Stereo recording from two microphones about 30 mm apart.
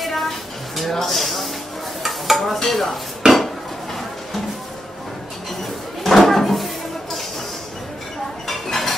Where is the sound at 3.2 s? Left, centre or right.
Right.